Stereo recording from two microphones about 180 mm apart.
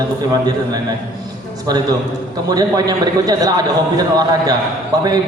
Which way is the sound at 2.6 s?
20° right (ahead or behind).